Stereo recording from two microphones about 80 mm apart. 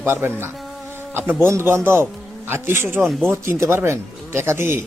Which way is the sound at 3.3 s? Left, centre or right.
Right.